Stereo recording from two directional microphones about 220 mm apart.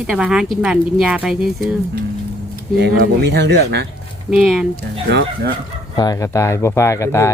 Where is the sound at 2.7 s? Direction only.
50° right (ahead or behind).